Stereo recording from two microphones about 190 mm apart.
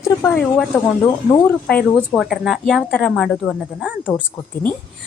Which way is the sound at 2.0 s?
Centre (ahead or behind).